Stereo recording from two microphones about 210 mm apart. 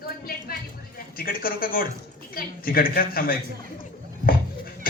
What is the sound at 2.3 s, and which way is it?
A man's voice, 45° left (ahead or behind).